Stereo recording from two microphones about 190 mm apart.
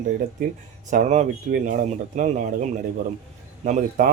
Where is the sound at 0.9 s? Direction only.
35° right (ahead or behind).